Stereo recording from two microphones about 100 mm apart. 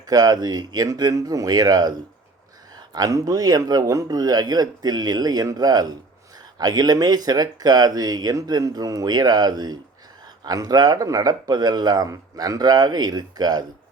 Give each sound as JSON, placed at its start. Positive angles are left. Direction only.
{"t": 0.1, "sound": "speech", "side_deg": -40}